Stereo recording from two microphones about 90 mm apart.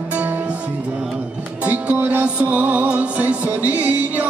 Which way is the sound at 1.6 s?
15° right (ahead or behind).